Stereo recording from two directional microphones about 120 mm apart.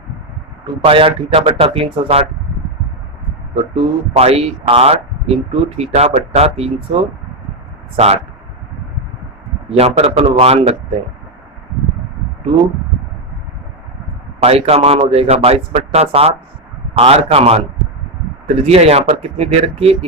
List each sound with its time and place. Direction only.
0.6 s a man's voice: 50° right (ahead or behind)
3.5 s speech: 60° right (ahead or behind)
9.6 s speech: 60° right (ahead or behind)
14.4 s speech: 55° right (ahead or behind)